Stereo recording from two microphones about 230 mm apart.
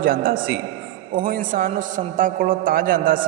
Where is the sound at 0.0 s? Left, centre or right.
Right.